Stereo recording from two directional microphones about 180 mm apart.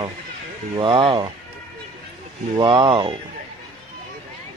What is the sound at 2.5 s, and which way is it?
Speech, 30° right (ahead or behind).